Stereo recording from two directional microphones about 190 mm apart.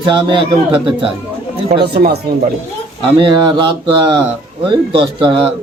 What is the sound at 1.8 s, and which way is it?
Speech, 60° right (ahead or behind).